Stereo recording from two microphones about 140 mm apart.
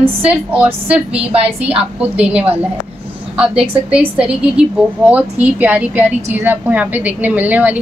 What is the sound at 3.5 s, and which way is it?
Speech, 40° right (ahead or behind).